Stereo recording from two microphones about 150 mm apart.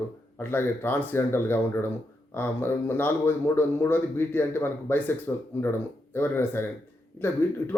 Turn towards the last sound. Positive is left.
turn(degrees=15)  # may be behind; listen again after turning